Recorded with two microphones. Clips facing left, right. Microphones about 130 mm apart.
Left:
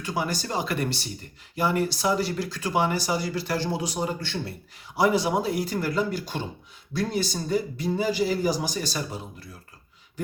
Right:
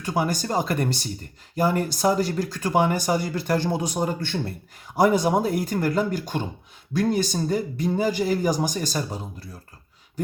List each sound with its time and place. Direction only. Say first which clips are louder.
0.0 s speech: right 4 dB; 45° right (ahead or behind)